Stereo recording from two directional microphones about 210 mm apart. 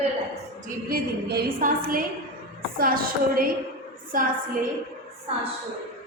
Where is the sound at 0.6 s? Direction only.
45° right (ahead or behind).